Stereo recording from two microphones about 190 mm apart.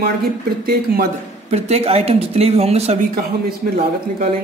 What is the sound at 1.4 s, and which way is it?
Speech, 35° right (ahead or behind).